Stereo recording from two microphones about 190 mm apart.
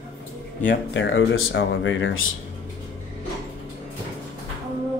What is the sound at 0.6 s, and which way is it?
Speech, 75° left (ahead or behind).